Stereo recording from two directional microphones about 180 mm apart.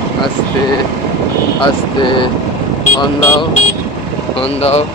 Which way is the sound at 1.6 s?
25° left (ahead or behind).